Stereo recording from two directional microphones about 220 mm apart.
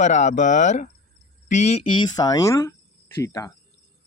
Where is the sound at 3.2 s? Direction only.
15° left (ahead or behind).